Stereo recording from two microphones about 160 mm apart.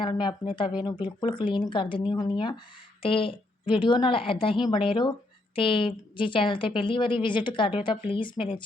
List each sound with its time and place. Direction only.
0.0 s a woman's voice: 30° left (ahead or behind)